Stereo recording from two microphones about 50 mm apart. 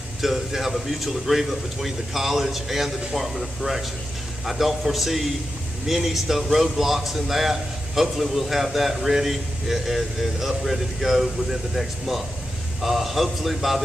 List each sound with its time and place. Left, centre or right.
0.2 s a man's voice: centre
12.8 s a man's voice: centre